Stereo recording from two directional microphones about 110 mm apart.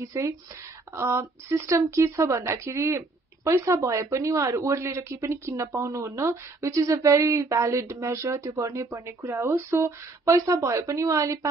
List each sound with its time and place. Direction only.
0.0 s speech: 25° right (ahead or behind)